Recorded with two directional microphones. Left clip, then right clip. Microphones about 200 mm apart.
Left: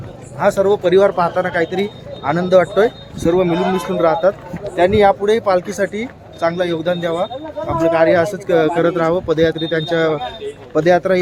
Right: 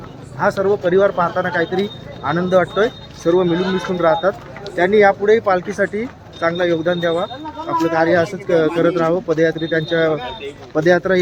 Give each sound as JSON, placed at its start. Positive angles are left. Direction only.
{"t": 0.3, "sound": "speech", "side_deg": 15}